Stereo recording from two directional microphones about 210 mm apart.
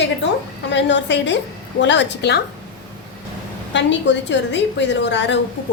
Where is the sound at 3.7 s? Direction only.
60° left (ahead or behind).